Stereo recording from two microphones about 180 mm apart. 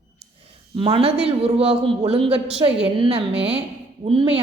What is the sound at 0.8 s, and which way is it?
A woman's voice, 30° right (ahead or behind).